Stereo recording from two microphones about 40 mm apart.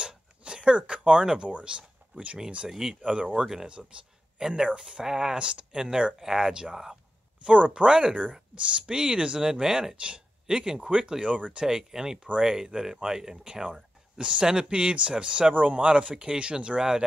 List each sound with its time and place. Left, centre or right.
0.0 s a sound: right
1.5 s speech: right
2.7 s speech: centre
3.1 s speech: right
3.8 s speech: centre
4.6 s speech: right
5.0 s speech: centre
7.4 s speech: right
11.6 s speech: centre
15.5 s speech: right; by 17.0 s centre